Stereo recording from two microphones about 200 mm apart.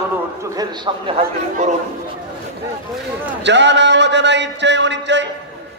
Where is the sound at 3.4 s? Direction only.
60° right (ahead or behind).